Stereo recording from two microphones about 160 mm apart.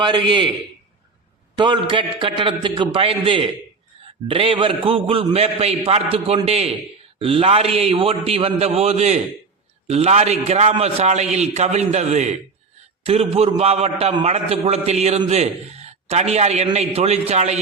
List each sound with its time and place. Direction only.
0.0 s a man's voice: 30° right (ahead or behind)
1.5 s a man's voice: 30° right (ahead or behind); by 17.6 s 45° right (ahead or behind)